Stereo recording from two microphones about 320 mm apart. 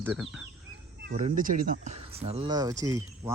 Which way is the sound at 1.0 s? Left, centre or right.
Right.